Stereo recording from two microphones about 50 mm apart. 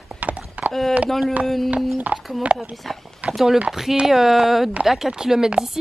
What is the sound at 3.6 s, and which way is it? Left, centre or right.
Speech, centre.